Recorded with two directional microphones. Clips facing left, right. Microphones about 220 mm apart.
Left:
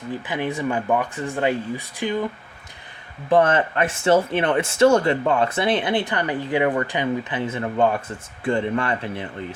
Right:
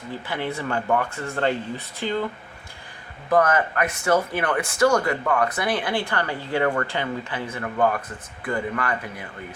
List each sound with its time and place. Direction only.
0.3 s speech: 15° left (ahead or behind)
3.2 s speech: 25° left (ahead or behind)